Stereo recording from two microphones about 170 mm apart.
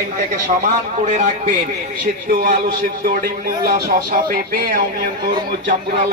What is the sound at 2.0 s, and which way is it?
A man's voice, 55° right (ahead or behind).